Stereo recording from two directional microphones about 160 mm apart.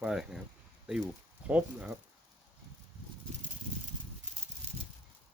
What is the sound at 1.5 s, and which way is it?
Speech, 5° right (ahead or behind).